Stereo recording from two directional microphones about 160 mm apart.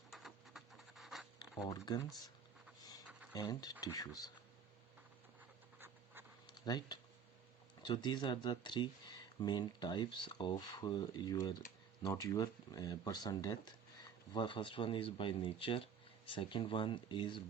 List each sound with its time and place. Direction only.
0.1 s scratch: centre (ahead or behind)
1.7 s speech: 25° left (ahead or behind)
3.3 s speech: 25° left (ahead or behind)
6.5 s speech: 25° left (ahead or behind)